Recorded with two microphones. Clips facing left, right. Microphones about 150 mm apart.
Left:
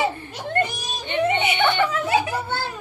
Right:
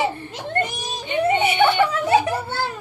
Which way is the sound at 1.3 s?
40° right (ahead or behind).